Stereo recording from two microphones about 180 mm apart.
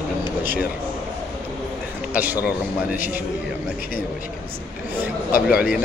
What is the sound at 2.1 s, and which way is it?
Speech, 10° right (ahead or behind).